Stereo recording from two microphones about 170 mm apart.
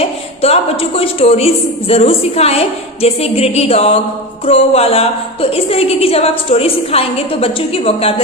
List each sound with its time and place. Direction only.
0.0 s a woman's voice: 35° left (ahead or behind)